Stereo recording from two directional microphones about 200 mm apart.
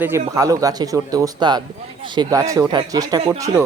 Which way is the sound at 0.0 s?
15° right (ahead or behind).